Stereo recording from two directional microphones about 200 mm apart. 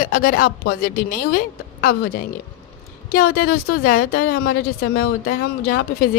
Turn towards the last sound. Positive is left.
turn(degrees=45)  # may be behind; listen again after turning